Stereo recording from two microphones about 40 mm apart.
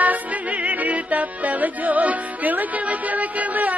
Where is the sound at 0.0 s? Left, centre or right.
Right.